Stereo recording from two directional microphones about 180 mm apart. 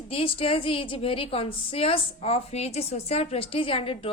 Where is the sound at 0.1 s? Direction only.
30° left (ahead or behind).